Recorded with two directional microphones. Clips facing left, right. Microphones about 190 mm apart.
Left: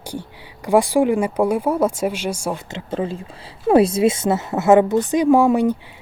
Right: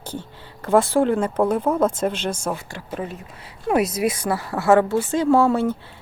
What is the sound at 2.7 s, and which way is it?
A woman's voice, 30° left (ahead or behind).